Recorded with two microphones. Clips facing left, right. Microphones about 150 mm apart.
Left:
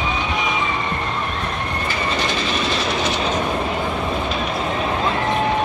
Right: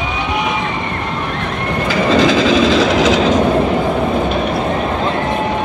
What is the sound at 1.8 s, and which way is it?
Train, 90° right.